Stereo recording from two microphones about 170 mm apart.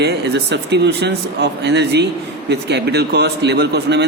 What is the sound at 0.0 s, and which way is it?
A man's voice, 75° right (ahead or behind).